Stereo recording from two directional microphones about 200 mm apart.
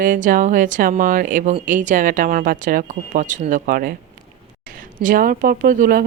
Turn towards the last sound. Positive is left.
turn(degrees=-45)  # may be behind; listen again after turning